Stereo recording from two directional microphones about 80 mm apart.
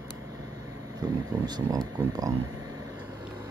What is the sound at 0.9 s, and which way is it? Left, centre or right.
Speech, right.